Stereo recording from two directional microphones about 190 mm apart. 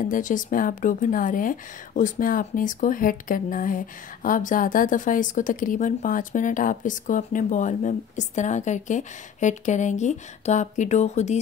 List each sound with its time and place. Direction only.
0.0 s speech: 45° left (ahead or behind)